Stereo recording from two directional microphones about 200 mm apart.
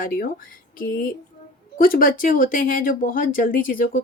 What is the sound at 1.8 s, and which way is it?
Speech, 45° left (ahead or behind).